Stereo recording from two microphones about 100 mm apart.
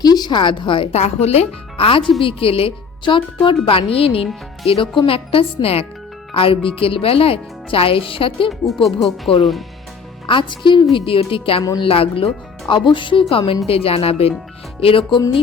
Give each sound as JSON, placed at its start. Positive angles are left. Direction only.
{"t": 0.0, "sound": "speech", "side_deg": 45}
{"t": 8.4, "sound": "speech", "side_deg": 0}
{"t": 10.2, "sound": "a woman's voice", "side_deg": 55}
{"t": 10.9, "sound": "speech", "side_deg": 65}
{"t": 13.7, "sound": "speech", "side_deg": 75}